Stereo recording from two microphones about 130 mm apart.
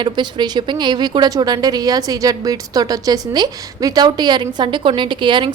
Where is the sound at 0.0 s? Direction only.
35° right (ahead or behind).